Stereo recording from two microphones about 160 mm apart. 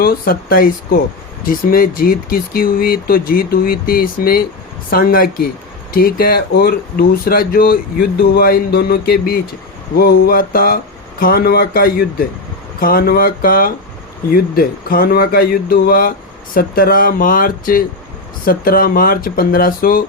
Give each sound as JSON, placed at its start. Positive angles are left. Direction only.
{"t": 0.0, "sound": "speech", "side_deg": 65}